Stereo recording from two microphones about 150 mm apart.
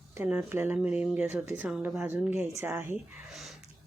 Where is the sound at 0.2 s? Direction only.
10° right (ahead or behind).